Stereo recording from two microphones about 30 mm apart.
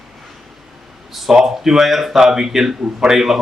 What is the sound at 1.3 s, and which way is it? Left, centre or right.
A man's voice, centre.